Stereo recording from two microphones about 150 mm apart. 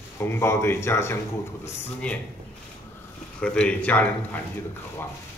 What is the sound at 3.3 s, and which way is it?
Speech, 5° left (ahead or behind).